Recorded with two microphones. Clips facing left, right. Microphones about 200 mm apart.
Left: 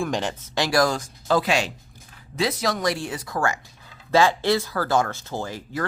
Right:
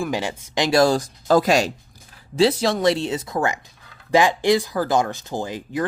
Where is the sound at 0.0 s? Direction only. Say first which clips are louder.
Right 1 dB; 10° right (ahead or behind); by 1.7 s 40° right (ahead or behind).